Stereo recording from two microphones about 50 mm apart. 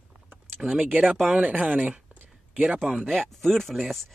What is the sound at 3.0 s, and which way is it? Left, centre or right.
Speech, centre.